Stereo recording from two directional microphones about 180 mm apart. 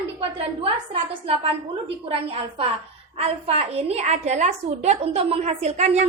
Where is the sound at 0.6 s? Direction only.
30° right (ahead or behind).